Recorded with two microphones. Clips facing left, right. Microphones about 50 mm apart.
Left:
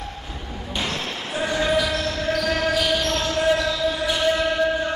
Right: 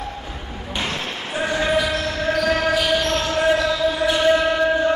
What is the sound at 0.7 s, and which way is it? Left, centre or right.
Basketball bounce, centre.